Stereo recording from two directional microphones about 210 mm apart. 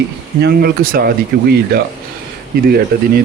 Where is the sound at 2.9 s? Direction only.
45° right (ahead or behind).